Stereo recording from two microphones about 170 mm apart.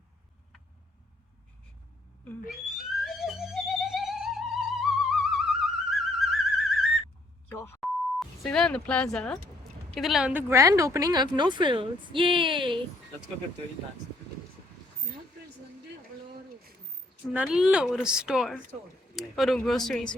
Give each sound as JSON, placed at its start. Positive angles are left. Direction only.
{"t": 2.5, "sound": "music", "side_deg": 0}
{"t": 7.4, "sound": "beep", "side_deg": 10}
{"t": 7.8, "sound": "beep", "side_deg": 0}
{"t": 9.9, "sound": "speech", "side_deg": 0}
{"t": 17.3, "sound": "a woman's voice", "side_deg": -5}